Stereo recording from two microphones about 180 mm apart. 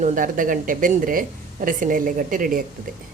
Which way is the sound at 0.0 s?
45° right (ahead or behind).